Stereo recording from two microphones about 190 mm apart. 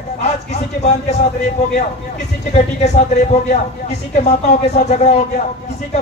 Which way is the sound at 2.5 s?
35° left (ahead or behind).